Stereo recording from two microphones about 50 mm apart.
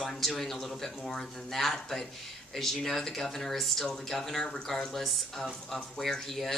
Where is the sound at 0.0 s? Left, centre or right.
Centre.